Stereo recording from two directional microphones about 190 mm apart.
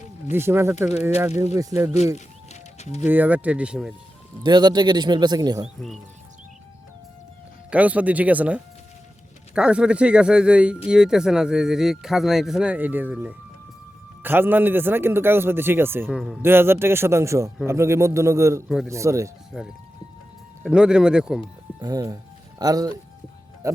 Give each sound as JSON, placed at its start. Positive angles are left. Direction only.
{"t": 0.3, "sound": "a man's voice", "side_deg": -10}
{"t": 2.1, "sound": "music", "side_deg": 35}
{"t": 3.0, "sound": "a man's voice", "side_deg": -10}
{"t": 4.4, "sound": "speech", "side_deg": -20}
{"t": 5.6, "sound": "speech", "side_deg": 0}
{"t": 7.7, "sound": "a man's voice", "side_deg": -5}
{"t": 16.0, "sound": "speech", "side_deg": 0}
{"t": 16.4, "sound": "a man's voice", "side_deg": -10}
{"t": 19.5, "sound": "speech", "side_deg": 0}
{"t": 21.8, "sound": "speech", "side_deg": -20}